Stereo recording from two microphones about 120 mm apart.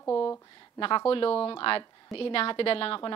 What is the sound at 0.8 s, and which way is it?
A woman's voice, 45° left (ahead or behind).